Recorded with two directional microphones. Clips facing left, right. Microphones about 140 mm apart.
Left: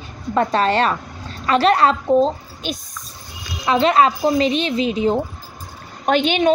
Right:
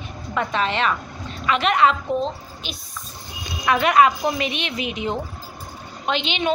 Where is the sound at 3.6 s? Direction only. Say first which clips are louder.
Left 2 dB; 30° left (ahead or behind).